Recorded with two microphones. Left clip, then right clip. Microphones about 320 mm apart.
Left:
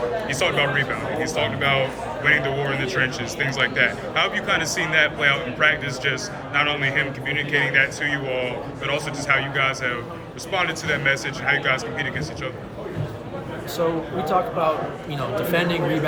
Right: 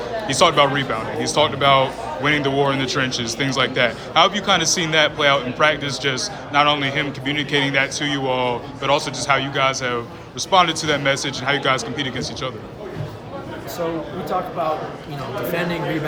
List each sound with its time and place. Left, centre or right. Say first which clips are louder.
0.3 s a man's voice: right 8 dB; centre